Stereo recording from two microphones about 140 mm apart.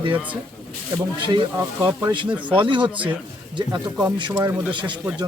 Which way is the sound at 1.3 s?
25° right (ahead or behind).